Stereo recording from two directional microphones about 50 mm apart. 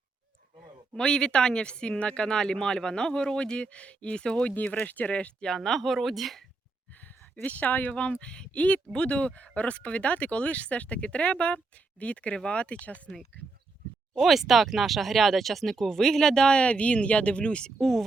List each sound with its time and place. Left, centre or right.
0.9 s speech: centre
4.5 s speech: left
5.5 s speech: centre
7.4 s a woman's voice: left
8.2 s speech: centre
14.2 s speech: centre; by 17.7 s left
17.7 s speech: centre